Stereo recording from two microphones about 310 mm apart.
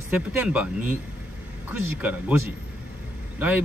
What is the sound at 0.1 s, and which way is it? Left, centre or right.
Speech, centre.